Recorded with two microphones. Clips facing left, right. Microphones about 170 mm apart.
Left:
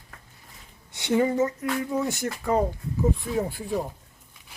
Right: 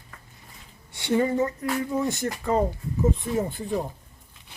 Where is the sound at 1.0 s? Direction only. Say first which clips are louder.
Left 1 dB; 10° left (ahead or behind).